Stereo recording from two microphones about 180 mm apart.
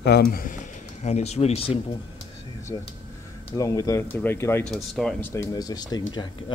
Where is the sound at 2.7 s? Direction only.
20° left (ahead or behind).